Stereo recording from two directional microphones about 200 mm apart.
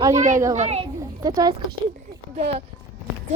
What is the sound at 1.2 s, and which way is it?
Speech, 20° right (ahead or behind).